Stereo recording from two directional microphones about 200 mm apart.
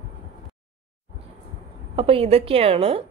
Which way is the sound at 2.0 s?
30° right (ahead or behind).